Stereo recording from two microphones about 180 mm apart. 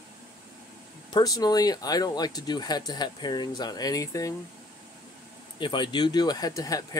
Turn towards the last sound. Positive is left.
turn(degrees=20)  # may be behind; listen again after turning